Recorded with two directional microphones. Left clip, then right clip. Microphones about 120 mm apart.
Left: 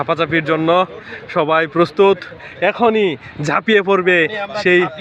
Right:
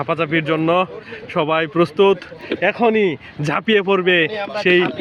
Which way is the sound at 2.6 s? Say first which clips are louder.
Left 2 dB; 25° right (ahead or behind).